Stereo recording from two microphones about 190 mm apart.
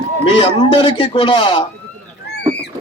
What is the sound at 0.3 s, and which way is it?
A man's voice, 25° left (ahead or behind).